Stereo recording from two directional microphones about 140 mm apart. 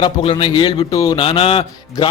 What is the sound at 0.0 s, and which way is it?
A man's voice, 40° left (ahead or behind).